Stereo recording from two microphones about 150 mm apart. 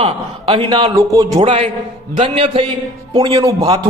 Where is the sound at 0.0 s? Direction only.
35° right (ahead or behind).